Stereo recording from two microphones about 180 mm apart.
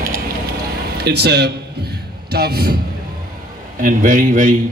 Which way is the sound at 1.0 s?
65° right (ahead or behind).